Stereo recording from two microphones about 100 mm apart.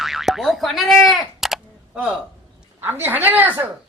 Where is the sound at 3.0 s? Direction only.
20° right (ahead or behind).